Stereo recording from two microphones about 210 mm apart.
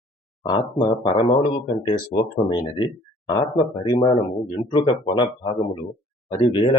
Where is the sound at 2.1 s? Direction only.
20° left (ahead or behind).